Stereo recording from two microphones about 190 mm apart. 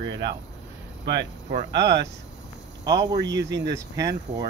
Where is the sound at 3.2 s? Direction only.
65° right (ahead or behind).